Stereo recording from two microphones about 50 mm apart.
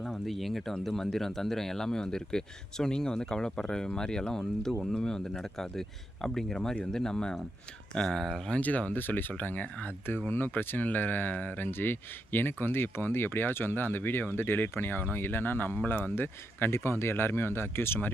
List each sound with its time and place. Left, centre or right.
0.0 s speech: centre
8.5 s speech: left
16.7 s speech: left